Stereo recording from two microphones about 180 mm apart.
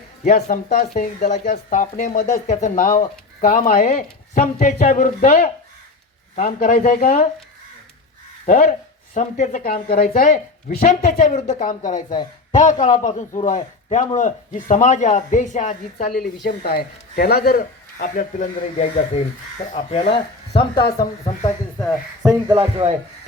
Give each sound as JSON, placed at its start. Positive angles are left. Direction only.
{"t": 0.3, "sound": "a man's voice", "side_deg": 45}
{"t": 8.4, "sound": "a man's voice", "side_deg": 50}
{"t": 16.1, "sound": "speech", "side_deg": 60}
{"t": 18.0, "sound": "a man's voice", "side_deg": 45}
{"t": 21.8, "sound": "speech", "side_deg": 0}
{"t": 22.4, "sound": "a man's voice", "side_deg": -35}